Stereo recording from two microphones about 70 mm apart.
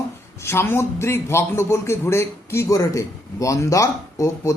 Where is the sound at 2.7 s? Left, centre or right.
Left.